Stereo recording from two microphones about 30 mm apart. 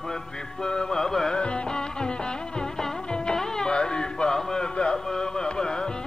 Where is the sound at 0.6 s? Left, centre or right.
Left.